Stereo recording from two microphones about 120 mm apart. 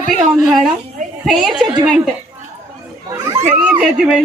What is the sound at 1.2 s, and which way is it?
Speech, 5° right (ahead or behind).